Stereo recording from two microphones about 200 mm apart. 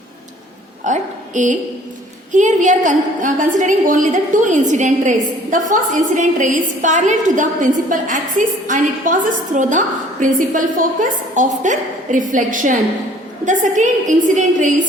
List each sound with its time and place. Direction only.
0.9 s a woman's voice: 40° right (ahead or behind)